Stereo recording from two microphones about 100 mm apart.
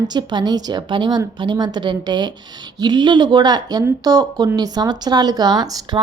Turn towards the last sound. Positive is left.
turn(degrees=-40)  # may be behind; listen again after turning